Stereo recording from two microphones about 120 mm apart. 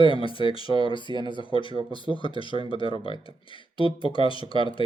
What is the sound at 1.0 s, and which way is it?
Speech, 40° right (ahead or behind).